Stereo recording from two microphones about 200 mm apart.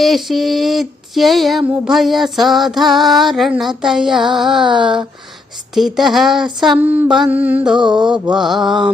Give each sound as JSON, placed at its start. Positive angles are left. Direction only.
{"t": 0.0, "sound": "music", "side_deg": 0}
{"t": 7.8, "sound": "mantra", "side_deg": -20}
{"t": 8.1, "sound": "music", "side_deg": -5}